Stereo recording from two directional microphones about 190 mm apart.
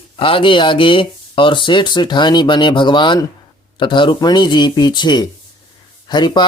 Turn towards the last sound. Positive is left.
turn(degrees=25)  # may be behind; listen again after turning